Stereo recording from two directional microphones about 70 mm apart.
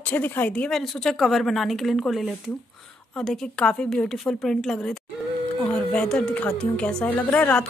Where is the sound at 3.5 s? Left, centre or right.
Centre.